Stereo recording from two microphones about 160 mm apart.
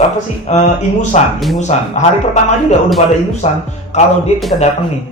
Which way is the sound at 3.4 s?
40° left (ahead or behind).